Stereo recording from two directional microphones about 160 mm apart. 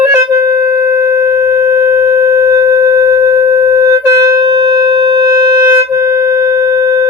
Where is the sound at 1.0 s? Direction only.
20° right (ahead or behind).